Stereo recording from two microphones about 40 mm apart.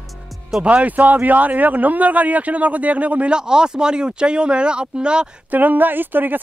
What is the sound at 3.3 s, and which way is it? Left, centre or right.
Speech, centre.